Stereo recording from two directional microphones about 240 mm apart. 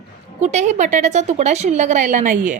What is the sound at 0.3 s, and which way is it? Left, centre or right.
A woman's voice, right.